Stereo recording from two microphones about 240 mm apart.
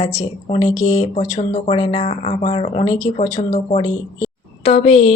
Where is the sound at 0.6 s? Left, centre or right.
Left.